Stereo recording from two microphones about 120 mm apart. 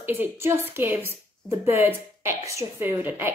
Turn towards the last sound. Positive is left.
turn(degrees=-20)  # may be behind; listen again after turning